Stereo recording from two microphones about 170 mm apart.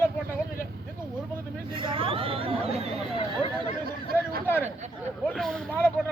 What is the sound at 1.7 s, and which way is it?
Speech, 30° right (ahead or behind).